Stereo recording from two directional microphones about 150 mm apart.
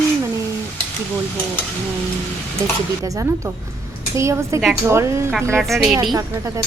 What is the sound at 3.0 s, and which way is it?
Speech, 20° right (ahead or behind).